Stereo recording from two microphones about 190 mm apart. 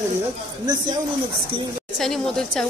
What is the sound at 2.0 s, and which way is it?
Speech, centre (ahead or behind).